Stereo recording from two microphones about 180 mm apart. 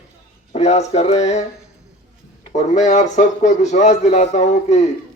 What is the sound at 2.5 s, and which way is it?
A man's voice, 40° left (ahead or behind).